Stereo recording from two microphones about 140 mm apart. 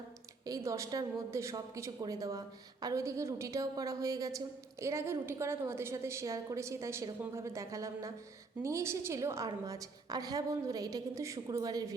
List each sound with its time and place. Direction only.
0.4 s a woman's voice: 25° right (ahead or behind)